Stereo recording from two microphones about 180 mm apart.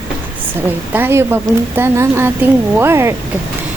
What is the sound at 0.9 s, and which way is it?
Speech, 10° right (ahead or behind).